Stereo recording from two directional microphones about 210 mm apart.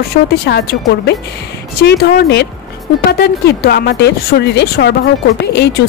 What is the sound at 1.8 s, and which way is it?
Speech, 50° left (ahead or behind).